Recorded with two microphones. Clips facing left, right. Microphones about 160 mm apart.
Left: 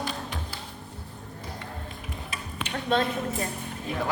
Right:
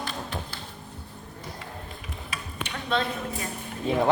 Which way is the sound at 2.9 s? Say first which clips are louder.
Left 2 dB; 45° left (ahead or behind).